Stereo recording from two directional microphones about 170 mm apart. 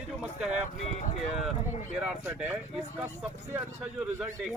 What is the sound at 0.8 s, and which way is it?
Speech, 40° left (ahead or behind).